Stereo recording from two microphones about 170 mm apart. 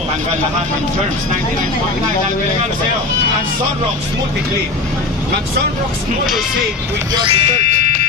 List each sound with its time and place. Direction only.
7.3 s speech: 40° right (ahead or behind)